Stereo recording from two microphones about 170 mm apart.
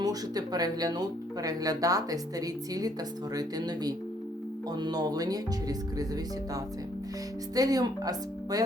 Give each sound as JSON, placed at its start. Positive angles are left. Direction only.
{"t": 0.0, "sound": "speech", "side_deg": -20}